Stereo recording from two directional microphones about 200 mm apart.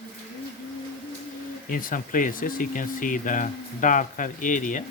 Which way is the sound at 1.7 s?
45° left (ahead or behind).